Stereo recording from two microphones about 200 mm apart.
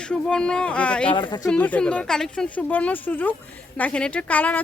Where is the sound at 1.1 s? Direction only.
25° left (ahead or behind).